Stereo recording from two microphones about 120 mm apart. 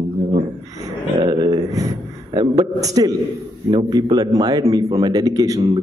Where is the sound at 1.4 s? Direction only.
30° right (ahead or behind).